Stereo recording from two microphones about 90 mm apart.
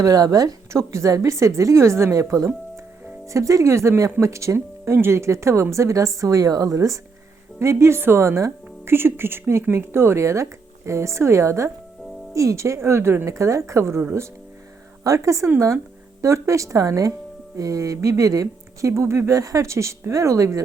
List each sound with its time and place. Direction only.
0.0 s speech: 40° right (ahead or behind)